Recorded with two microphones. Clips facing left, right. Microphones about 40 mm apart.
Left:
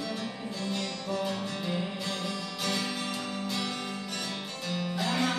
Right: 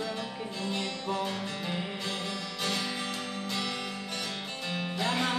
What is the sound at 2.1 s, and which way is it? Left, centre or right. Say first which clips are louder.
Music: left 1 dB; right.